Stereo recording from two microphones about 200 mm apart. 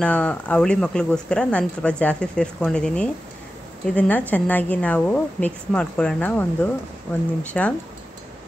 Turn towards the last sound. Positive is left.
turn(degrees=5)  # may be behind; listen again after turning